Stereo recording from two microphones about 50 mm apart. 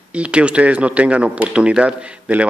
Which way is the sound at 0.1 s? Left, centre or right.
Right.